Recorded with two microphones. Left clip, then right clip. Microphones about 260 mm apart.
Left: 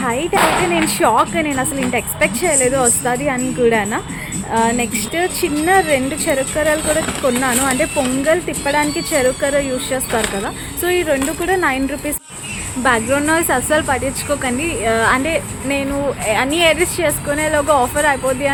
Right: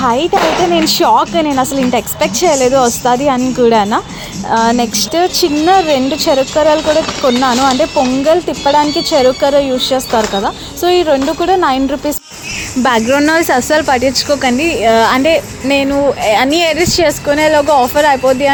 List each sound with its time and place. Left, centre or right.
0.0 s a child's voice: right
12.8 s speech: right